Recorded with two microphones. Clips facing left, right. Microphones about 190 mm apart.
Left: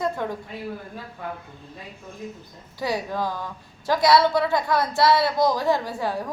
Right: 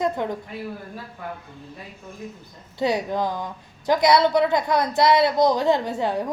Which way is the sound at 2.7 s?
20° right (ahead or behind).